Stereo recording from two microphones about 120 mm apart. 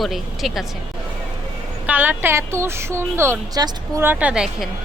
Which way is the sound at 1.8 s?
15° right (ahead or behind).